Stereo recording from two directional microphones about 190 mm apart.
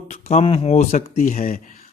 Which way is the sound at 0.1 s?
35° left (ahead or behind).